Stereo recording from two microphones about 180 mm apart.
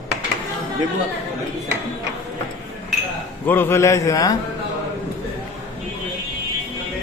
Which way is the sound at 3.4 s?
10° left (ahead or behind).